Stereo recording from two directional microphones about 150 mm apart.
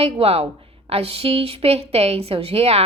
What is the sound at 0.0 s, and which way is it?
A woman's voice, 40° right (ahead or behind).